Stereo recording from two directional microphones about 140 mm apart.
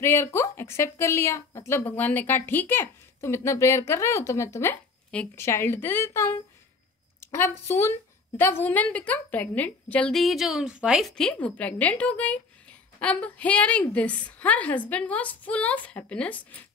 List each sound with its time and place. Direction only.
0.0 s speech: 15° left (ahead or behind)
5.1 s a woman's voice: 10° left (ahead or behind)